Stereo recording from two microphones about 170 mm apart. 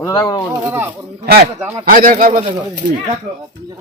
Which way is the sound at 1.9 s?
55° right (ahead or behind).